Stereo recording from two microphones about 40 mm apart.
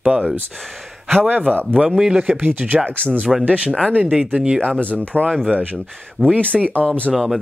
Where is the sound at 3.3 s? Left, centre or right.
Centre.